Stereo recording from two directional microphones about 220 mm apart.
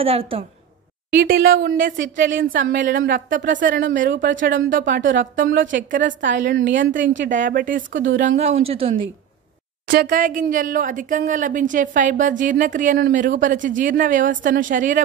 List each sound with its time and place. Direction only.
0.0 s speech: 25° right (ahead or behind)
1.1 s speech: 45° right (ahead or behind)
5.3 s a woman's voice: 55° right (ahead or behind)
5.9 s speech: 35° right (ahead or behind)
6.4 s a woman's voice: 55° right (ahead or behind)
7.2 s speech: 35° right (ahead or behind)
7.9 s a woman's voice: 60° right (ahead or behind)
8.2 s speech: 35° right (ahead or behind)
9.8 s speech: 40° right (ahead or behind)